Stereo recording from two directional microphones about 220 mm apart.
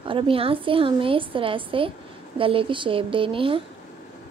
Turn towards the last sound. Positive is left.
turn(degrees=-25)  # may be behind; listen again after turning